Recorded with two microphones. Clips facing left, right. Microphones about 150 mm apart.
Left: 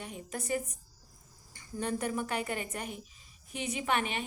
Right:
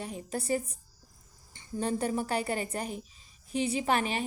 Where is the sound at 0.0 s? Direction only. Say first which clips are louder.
Right 4 dB; 35° right (ahead or behind).